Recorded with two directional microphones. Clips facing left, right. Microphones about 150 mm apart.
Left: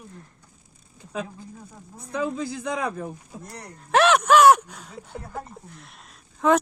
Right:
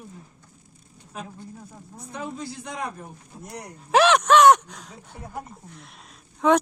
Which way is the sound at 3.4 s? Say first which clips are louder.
Right 2 dB; 10° right (ahead or behind).